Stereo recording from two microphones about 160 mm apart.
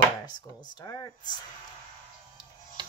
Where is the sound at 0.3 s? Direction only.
25° left (ahead or behind).